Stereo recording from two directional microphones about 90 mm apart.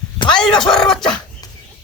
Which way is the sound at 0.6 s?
5° left (ahead or behind).